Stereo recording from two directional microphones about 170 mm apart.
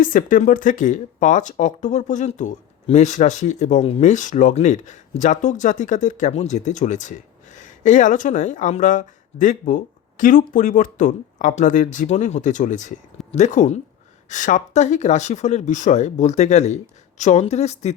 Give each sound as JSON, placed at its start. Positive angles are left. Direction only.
{"t": 0.0, "sound": "speech", "side_deg": 55}